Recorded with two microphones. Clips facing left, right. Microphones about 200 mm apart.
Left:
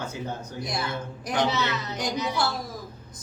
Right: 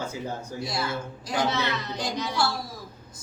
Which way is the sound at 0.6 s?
20° left (ahead or behind).